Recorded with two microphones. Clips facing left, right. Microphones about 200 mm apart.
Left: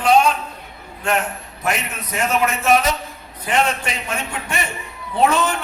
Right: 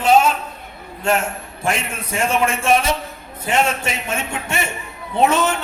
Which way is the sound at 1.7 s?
30° right (ahead or behind).